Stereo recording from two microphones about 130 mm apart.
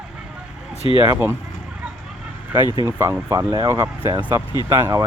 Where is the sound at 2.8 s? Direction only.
20° right (ahead or behind).